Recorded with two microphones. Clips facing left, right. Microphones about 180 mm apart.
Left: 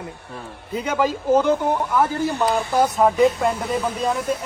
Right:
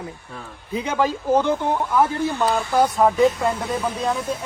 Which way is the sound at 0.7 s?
10° right (ahead or behind).